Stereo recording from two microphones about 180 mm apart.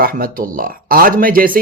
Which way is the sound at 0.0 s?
55° right (ahead or behind).